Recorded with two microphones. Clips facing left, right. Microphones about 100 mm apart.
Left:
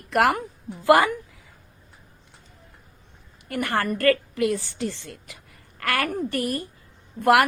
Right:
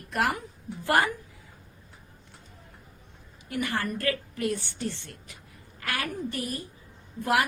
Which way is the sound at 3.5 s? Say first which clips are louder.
Left 5 dB; 55° left (ahead or behind).